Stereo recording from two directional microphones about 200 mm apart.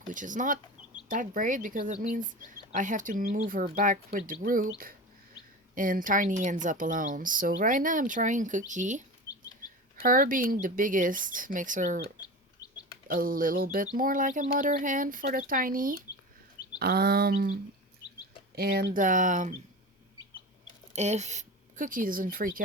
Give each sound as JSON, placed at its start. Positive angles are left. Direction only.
{"t": 0.1, "sound": "speech", "side_deg": -40}
{"t": 12.6, "sound": "chirp", "side_deg": 20}
{"t": 13.1, "sound": "speech", "side_deg": -45}
{"t": 18.9, "sound": "speech", "side_deg": -40}
{"t": 20.9, "sound": "speech", "side_deg": -35}